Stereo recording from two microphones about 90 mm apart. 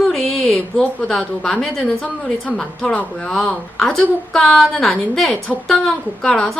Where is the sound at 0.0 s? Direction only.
5° left (ahead or behind).